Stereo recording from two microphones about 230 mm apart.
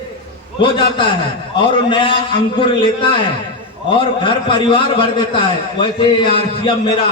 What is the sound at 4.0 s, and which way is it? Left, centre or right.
A man's voice, left.